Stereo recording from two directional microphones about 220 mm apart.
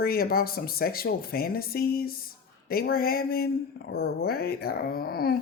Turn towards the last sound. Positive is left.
turn(degrees=45)  # may be behind; listen again after turning